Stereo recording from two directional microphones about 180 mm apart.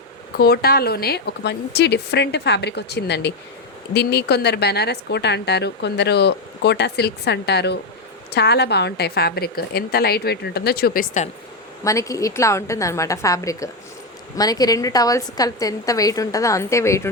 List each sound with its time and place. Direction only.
0.3 s a woman's voice: 60° left (ahead or behind)
11.8 s a woman's voice: 15° left (ahead or behind)